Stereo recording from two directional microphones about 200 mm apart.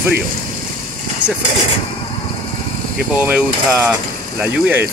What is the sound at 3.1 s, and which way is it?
Mechanisms, 5° right (ahead or behind).